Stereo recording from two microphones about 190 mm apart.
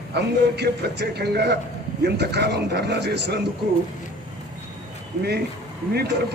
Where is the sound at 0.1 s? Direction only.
60° right (ahead or behind).